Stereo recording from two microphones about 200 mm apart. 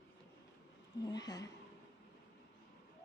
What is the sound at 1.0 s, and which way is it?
Speech, 20° left (ahead or behind).